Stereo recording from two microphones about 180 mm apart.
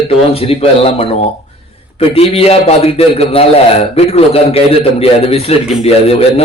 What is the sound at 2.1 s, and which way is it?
A man's voice, 35° left (ahead or behind).